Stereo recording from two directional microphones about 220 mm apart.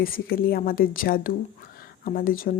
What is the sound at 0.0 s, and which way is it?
Speech, 40° left (ahead or behind).